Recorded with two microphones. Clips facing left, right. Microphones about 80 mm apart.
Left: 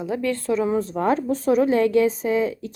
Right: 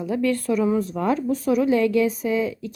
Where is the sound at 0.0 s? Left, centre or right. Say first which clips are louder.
Right 2 dB; left.